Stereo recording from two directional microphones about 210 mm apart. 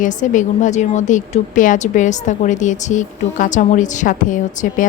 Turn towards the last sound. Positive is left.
turn(degrees=35)  # may be behind; listen again after turning